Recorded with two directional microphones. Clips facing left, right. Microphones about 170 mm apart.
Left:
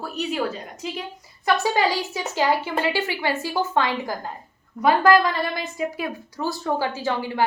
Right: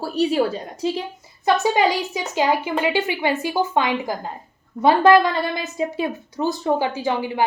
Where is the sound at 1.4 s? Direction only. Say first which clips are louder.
Right 3 dB; 20° right (ahead or behind).